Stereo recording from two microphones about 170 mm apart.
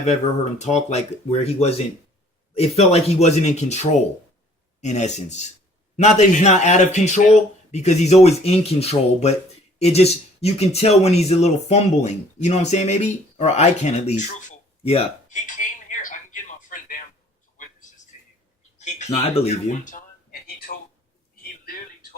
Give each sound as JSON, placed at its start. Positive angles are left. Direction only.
{"t": 0.6, "sound": "speech", "side_deg": 40}
{"t": 15.4, "sound": "telephone", "side_deg": 50}
{"t": 18.8, "sound": "speech", "side_deg": 40}
{"t": 20.7, "sound": "a sound", "side_deg": 55}